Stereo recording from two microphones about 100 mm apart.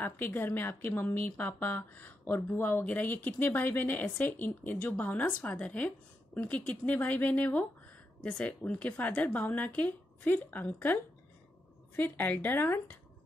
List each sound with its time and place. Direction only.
0.0 s speech: 20° left (ahead or behind)